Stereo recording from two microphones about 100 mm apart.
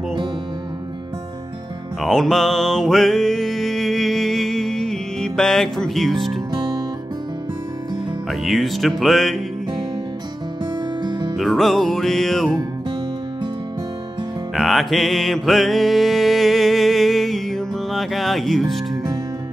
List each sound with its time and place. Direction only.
2.0 s music: centre (ahead or behind)
8.3 s music: centre (ahead or behind)
10.6 s music: 45° right (ahead or behind)
11.3 s music: centre (ahead or behind)
14.5 s music: centre (ahead or behind)